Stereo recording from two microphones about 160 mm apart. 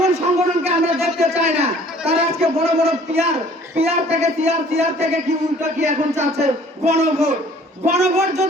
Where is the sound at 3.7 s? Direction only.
40° right (ahead or behind).